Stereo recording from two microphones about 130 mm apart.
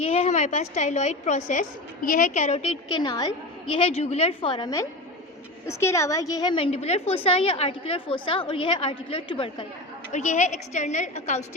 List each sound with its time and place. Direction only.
0.0 s a woman's voice: 50° left (ahead or behind); by 1.6 s 70° left (ahead or behind)
2.0 s a woman's voice: 80° left; by 2.7 s 55° left (ahead or behind)
3.0 s a woman's voice: 30° left (ahead or behind)
3.8 s a woman's voice: 55° left (ahead or behind)
5.6 s a woman's voice: 20° left (ahead or behind)
6.7 s a woman's voice: 55° left (ahead or behind)
10.1 s a woman's voice: 65° left (ahead or behind)